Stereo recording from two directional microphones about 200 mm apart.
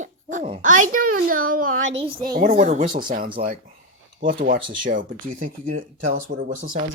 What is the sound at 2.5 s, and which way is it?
Speech, 35° right (ahead or behind).